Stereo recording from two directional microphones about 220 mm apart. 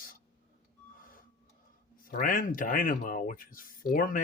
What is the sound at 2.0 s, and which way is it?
Speech, 40° left (ahead or behind).